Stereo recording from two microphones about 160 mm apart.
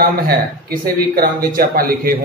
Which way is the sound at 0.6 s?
70° right (ahead or behind).